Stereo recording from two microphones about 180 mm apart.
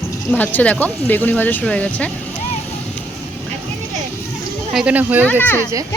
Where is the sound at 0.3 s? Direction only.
10° left (ahead or behind).